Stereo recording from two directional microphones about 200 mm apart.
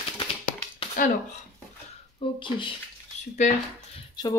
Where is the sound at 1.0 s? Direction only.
40° left (ahead or behind).